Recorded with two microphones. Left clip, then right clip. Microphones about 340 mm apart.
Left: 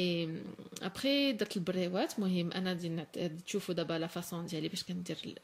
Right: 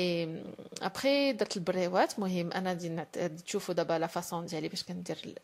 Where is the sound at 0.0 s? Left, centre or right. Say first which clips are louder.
Right 3 dB; centre.